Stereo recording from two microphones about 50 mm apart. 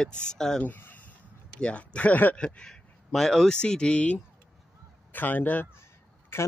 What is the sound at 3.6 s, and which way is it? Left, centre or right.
Speech, centre.